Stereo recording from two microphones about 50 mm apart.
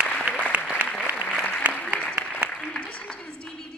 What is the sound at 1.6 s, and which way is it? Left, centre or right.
Applause, right.